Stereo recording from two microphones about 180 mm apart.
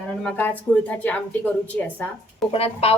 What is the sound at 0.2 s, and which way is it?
A woman's voice, 10° left (ahead or behind).